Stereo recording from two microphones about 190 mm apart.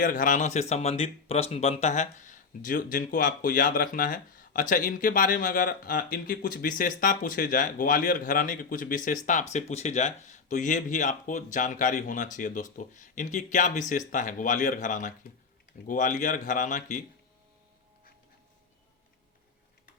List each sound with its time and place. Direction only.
0.0 s speech: 45° left (ahead or behind)